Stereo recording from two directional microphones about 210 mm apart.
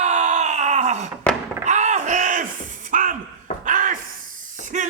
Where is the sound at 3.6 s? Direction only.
40° right (ahead or behind).